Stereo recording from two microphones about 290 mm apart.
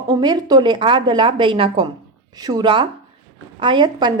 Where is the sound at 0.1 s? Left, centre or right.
Centre.